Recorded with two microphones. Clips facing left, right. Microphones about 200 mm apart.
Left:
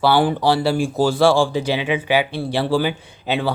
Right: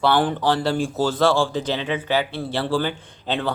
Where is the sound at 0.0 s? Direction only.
10° left (ahead or behind).